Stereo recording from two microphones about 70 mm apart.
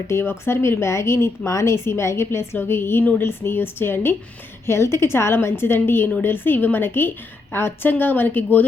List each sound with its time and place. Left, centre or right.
0.1 s a woman's voice: left